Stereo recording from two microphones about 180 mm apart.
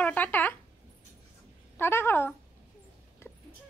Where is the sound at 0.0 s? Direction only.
10° left (ahead or behind).